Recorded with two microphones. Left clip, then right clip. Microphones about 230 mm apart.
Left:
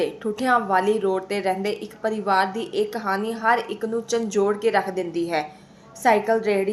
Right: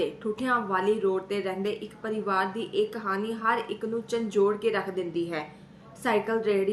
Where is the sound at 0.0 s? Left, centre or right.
Centre.